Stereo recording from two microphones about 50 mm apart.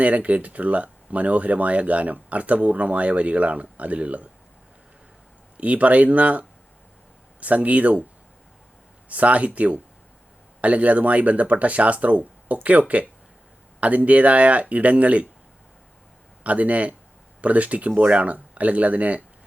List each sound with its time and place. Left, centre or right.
0.0 s speech: right
5.5 s speech: right
9.0 s speech: right
16.4 s speech: right